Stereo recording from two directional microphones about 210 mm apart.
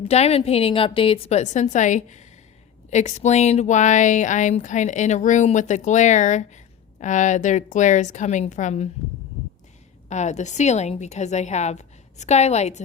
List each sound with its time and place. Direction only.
0.0 s speech: 30° left (ahead or behind)
10.1 s speech: 35° left (ahead or behind)